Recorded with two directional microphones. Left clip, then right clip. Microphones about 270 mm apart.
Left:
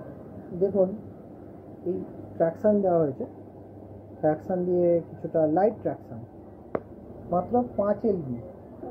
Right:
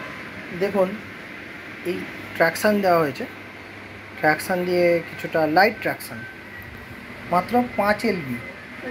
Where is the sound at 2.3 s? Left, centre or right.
Centre.